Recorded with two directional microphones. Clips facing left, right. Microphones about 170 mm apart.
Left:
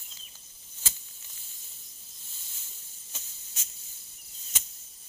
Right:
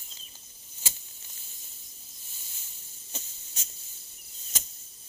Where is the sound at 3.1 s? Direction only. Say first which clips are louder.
Right 6 dB; 35° right (ahead or behind).